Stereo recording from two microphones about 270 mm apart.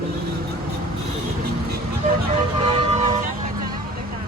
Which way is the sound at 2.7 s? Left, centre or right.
Right.